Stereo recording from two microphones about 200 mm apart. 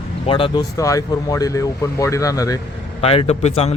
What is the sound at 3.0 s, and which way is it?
Speech, 30° left (ahead or behind).